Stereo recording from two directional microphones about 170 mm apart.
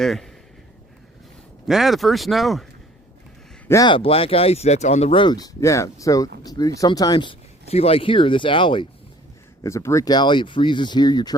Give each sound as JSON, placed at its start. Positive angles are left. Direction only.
{"t": 0.0, "sound": "speech", "side_deg": 0}
{"t": 1.6, "sound": "speech", "side_deg": 0}
{"t": 3.7, "sound": "speech", "side_deg": 25}
{"t": 5.2, "sound": "speech", "side_deg": 25}
{"t": 7.7, "sound": "speech", "side_deg": 35}
{"t": 9.6, "sound": "speech", "side_deg": 15}